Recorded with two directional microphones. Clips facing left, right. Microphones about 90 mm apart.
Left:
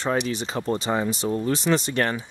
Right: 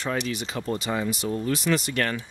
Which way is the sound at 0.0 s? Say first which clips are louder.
Left 4 dB; 30° left (ahead or behind).